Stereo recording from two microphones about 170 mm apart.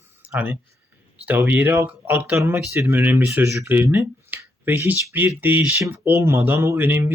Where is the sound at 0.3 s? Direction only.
10° right (ahead or behind).